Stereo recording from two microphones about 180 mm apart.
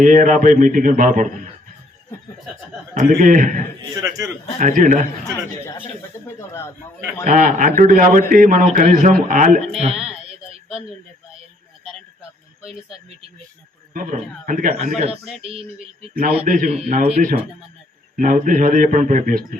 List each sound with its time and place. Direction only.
0.0 s speech: 45° right (ahead or behind)
2.9 s speech: 45° right (ahead or behind)
3.9 s a man's voice: 20° right (ahead or behind)
4.6 s speech: 45° right (ahead or behind)
6.2 s speech: 15° left (ahead or behind)
7.3 s speech: 45° right (ahead or behind)
9.7 s speech: 35° right (ahead or behind)
13.9 s a man's voice: 50° right (ahead or behind)
16.5 s speech: 50° right (ahead or behind)